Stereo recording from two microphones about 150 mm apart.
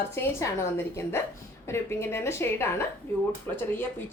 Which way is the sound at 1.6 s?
15° left (ahead or behind).